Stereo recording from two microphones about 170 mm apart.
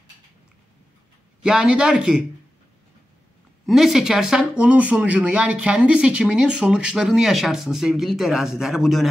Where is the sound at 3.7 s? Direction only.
Centre (ahead or behind).